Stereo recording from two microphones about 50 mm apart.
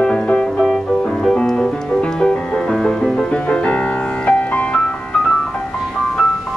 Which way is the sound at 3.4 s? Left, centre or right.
Left.